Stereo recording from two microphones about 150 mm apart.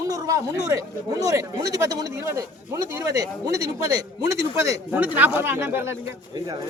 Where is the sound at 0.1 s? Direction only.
20° right (ahead or behind).